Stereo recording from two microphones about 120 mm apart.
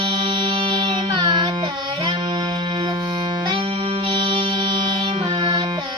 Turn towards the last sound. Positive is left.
turn(degrees=-40)  # may be behind; listen again after turning